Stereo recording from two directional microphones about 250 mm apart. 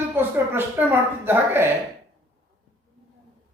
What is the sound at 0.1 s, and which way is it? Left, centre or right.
A woman's voice, centre.